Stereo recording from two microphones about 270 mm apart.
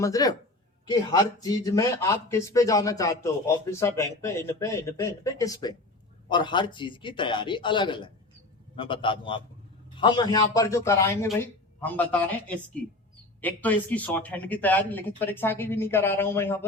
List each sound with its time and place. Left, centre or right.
0.0 s a man's voice: centre